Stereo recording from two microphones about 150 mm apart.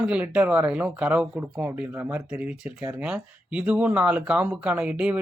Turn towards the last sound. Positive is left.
turn(degrees=-5)  # may be behind; listen again after turning